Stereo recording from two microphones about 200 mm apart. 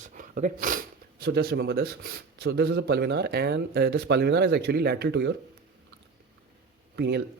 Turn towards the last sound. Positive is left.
turn(degrees=-55)  # may be behind; listen again after turning